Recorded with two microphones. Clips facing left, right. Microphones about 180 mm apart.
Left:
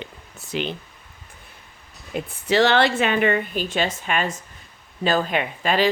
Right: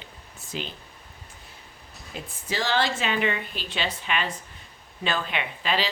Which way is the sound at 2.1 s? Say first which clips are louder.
Left 11 dB; 70° left (ahead or behind).